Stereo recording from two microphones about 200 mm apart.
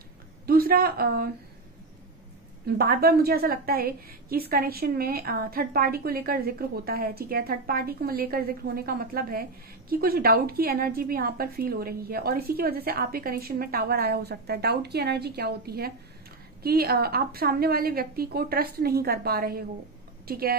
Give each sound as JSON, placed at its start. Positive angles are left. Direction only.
{"t": 0.5, "sound": "a woman's voice", "side_deg": -50}
{"t": 2.6, "sound": "a woman's voice", "side_deg": -50}